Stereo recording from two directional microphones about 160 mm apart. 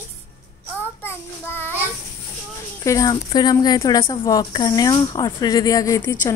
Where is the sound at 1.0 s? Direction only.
15° left (ahead or behind).